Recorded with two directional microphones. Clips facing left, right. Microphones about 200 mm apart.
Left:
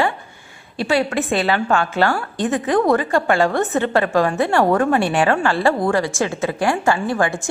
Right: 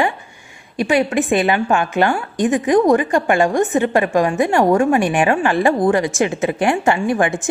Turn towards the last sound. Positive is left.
turn(degrees=-20)  # may be behind; listen again after turning